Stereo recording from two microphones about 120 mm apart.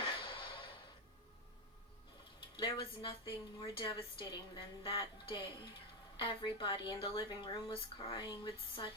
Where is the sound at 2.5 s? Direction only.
45° left (ahead or behind).